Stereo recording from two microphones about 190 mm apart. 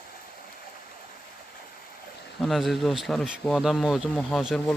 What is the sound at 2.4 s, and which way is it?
Speech, centre (ahead or behind).